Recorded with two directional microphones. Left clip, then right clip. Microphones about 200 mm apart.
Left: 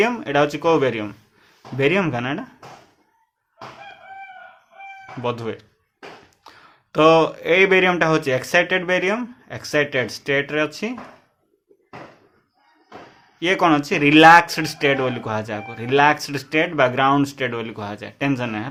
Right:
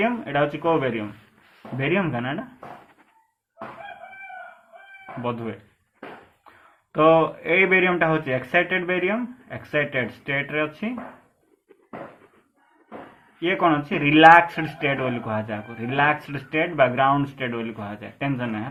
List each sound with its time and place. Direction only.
0.0 s speech: 30° left (ahead or behind)
5.2 s speech: 25° left (ahead or behind)
6.9 s speech: 30° left (ahead or behind)
13.4 s speech: 30° left (ahead or behind)